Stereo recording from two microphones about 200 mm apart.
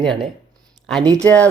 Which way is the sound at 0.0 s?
Centre (ahead or behind).